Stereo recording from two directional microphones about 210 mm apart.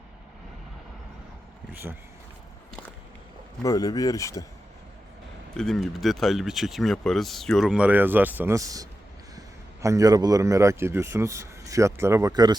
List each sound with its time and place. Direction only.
1.7 s speech: 10° right (ahead or behind)
3.6 s speech: 15° left (ahead or behind)
5.5 s speech: centre (ahead or behind); by 12.5 s 20° right (ahead or behind)